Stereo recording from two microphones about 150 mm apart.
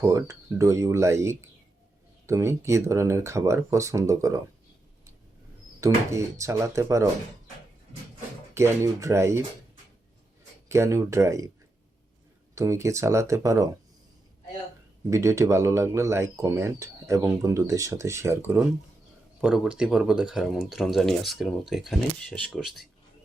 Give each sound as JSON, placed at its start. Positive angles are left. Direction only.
{"t": 0.0, "sound": "speech", "side_deg": -20}
{"t": 5.8, "sound": "speech", "side_deg": -20}
{"t": 8.5, "sound": "speech", "side_deg": -20}
{"t": 10.7, "sound": "speech", "side_deg": -20}
{"t": 12.5, "sound": "speech", "side_deg": -20}
{"t": 15.1, "sound": "speech", "side_deg": -20}